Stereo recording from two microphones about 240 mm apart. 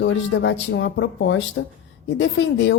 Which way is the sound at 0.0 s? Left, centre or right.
Left.